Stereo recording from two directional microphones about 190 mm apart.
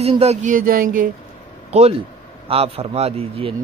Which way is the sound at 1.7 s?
35° right (ahead or behind).